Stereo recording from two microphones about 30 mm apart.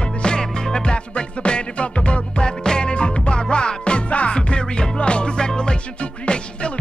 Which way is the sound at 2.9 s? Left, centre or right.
Left.